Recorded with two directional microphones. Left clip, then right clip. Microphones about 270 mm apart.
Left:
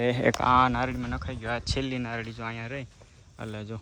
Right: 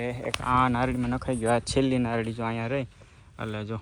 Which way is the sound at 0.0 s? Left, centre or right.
Left.